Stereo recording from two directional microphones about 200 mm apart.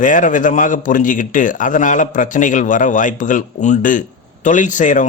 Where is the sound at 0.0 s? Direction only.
40° left (ahead or behind).